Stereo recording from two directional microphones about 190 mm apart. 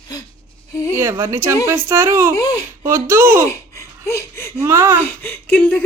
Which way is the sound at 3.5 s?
15° left (ahead or behind).